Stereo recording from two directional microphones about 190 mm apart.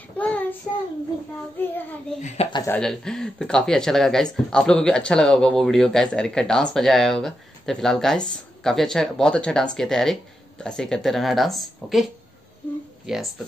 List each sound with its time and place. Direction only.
0.2 s child singing: 10° left (ahead or behind)
1.6 s speech: 10° left (ahead or behind)
2.8 s speech: 5° left (ahead or behind)